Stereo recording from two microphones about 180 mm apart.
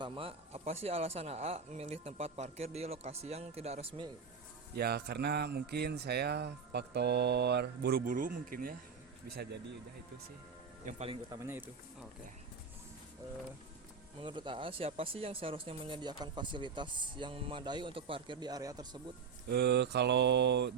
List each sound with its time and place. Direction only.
0.0 s speech: 30° right (ahead or behind)
4.7 s speech: 60° right (ahead or behind)
9.3 s speech: 65° right (ahead or behind)
10.8 s speech: 40° right (ahead or behind)
11.4 s speech: 10° right (ahead or behind)
14.2 s speech: 25° right (ahead or behind)
19.5 s mantra: 65° right (ahead or behind)